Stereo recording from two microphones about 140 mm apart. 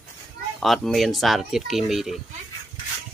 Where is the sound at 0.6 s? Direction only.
Centre (ahead or behind).